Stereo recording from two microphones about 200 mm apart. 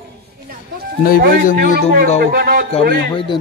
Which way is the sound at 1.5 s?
50° right (ahead or behind).